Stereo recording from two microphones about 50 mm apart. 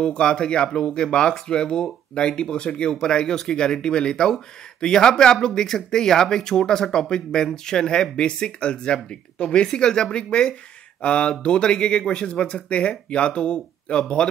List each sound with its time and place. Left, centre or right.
0.0 s speech: centre